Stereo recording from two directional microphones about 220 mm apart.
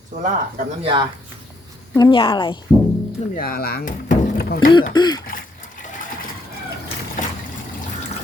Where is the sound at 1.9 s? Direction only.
20° left (ahead or behind).